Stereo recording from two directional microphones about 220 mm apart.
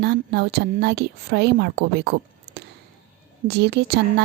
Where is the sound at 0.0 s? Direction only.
50° right (ahead or behind).